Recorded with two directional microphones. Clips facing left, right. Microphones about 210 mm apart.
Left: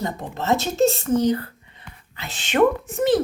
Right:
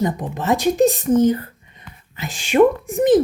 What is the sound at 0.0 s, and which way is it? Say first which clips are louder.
Speech: right 5 dB; 15° right (ahead or behind).